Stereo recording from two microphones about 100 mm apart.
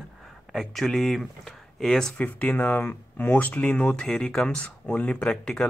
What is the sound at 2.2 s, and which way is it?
Speech, 15° left (ahead or behind).